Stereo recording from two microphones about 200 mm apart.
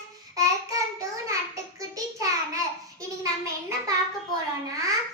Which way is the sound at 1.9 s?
15° right (ahead or behind).